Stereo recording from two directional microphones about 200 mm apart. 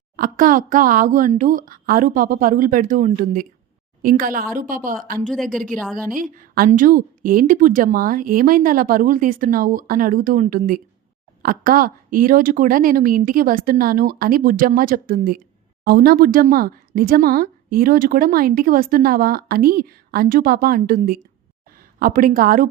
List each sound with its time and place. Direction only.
0.2 s speech: 45° right (ahead or behind)
5.8 s a woman's voice: centre (ahead or behind)
6.3 s a woman's voice: 45° right (ahead or behind)
11.4 s speech: 45° right (ahead or behind)